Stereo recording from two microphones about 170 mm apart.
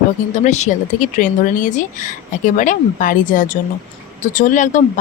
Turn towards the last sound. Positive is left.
turn(degrees=45)  # may be behind; listen again after turning